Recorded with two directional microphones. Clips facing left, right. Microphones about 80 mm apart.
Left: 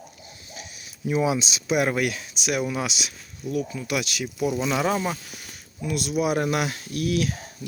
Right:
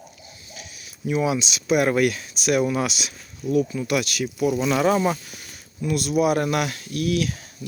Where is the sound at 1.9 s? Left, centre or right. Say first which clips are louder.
Right 5 dB; centre.